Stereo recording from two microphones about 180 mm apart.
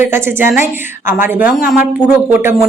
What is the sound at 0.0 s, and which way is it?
Speech, 10° right (ahead or behind).